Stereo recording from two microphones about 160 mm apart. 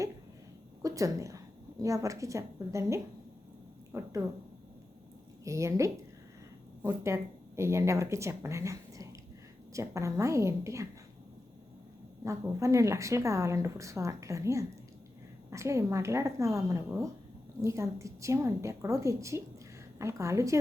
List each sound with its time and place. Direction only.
0.8 s a woman's voice: 20° right (ahead or behind)
5.5 s a woman's voice: 20° right (ahead or behind)
12.2 s a woman's voice: 20° right (ahead or behind)